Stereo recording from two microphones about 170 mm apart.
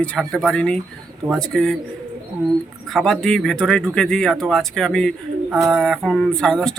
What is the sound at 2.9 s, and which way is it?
Speech, 5° left (ahead or behind).